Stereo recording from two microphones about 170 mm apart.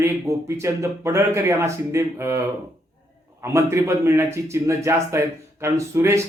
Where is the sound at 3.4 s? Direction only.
15° right (ahead or behind).